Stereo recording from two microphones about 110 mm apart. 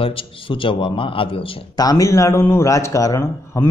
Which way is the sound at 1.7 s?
35° left (ahead or behind).